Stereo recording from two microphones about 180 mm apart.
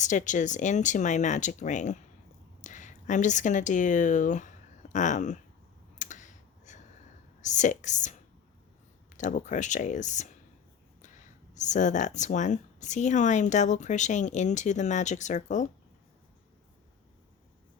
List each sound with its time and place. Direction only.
0.0 s speech: 45° left (ahead or behind)
6.0 s clicking: 45° left (ahead or behind)
7.4 s speech: 40° left (ahead or behind)